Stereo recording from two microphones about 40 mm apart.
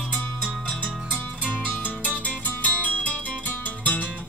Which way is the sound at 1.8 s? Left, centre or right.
Left.